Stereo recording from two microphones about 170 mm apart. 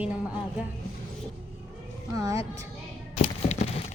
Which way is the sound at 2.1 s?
20° right (ahead or behind).